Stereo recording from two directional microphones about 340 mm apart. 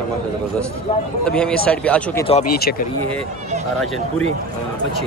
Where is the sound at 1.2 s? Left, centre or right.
Centre.